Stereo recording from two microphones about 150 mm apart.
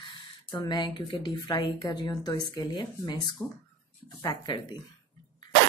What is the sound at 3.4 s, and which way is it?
Speech, 5° left (ahead or behind).